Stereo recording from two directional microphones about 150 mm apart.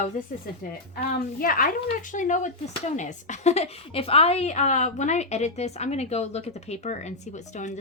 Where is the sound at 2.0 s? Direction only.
60° left (ahead or behind).